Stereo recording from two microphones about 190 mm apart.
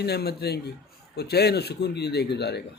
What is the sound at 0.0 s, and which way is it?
A man's voice, 60° left (ahead or behind).